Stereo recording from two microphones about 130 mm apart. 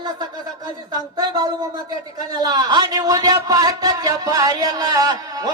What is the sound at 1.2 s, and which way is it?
A man's voice, 30° right (ahead or behind).